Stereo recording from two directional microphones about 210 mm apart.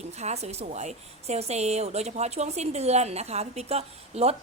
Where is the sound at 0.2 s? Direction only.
30° right (ahead or behind).